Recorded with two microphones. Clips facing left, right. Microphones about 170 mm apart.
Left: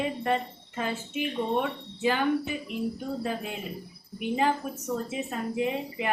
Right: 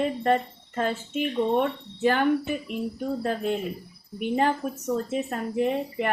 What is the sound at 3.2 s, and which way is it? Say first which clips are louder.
A woman's voice: right 6 dB; 55° right (ahead or behind).